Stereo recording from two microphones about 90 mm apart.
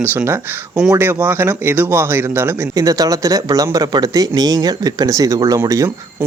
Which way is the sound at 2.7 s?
40° right (ahead or behind).